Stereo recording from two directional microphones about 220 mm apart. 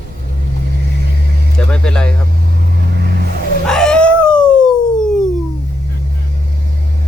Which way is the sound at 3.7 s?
5° left (ahead or behind).